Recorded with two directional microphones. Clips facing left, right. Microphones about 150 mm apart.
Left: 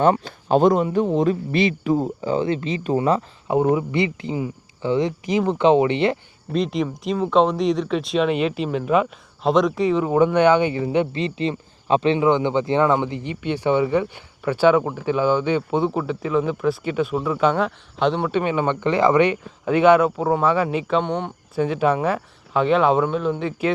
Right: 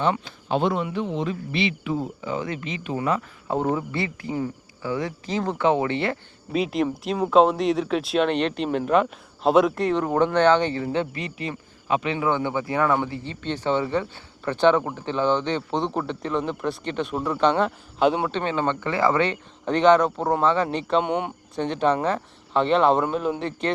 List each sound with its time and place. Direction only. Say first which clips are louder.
0.0 s speech: left 6 dB; 45° left (ahead or behind)
3.5 s speech: left 5 dB; 10° left (ahead or behind)
6.5 s speech: left 1 dB; 5° right (ahead or behind); by 11.1 s 15° left (ahead or behind)
11.1 s a man's voice: left 8 dB; 25° left (ahead or behind); by 18.3 s 5° right (ahead or behind)
18.3 s speech: left 4 dB; 10° left (ahead or behind)
21.0 s a man's voice: even; 10° right (ahead or behind)
21.5 s speech: left 3 dB; 5° left (ahead or behind)